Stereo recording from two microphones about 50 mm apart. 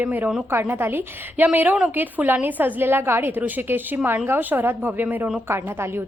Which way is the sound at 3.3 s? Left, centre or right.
Right.